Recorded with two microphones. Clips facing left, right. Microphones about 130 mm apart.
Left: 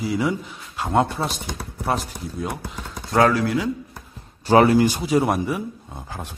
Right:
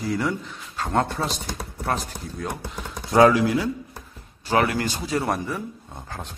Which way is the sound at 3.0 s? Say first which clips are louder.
Right 2 dB; 10° right (ahead or behind).